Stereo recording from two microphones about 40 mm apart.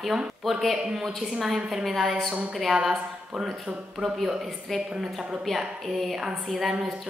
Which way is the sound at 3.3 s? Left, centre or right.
Right.